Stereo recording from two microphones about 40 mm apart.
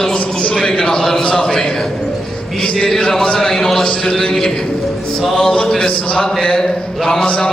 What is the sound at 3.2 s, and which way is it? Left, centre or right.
Speech, centre.